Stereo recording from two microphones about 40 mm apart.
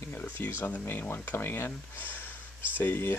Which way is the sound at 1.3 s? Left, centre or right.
Left.